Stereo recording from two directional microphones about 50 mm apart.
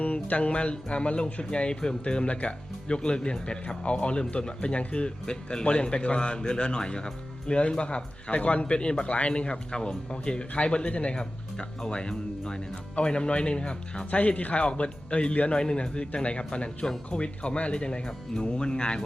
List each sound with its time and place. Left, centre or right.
0.0 s speech: left